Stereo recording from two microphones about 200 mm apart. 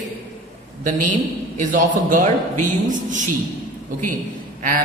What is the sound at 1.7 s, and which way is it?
Mantra, 40° right (ahead or behind).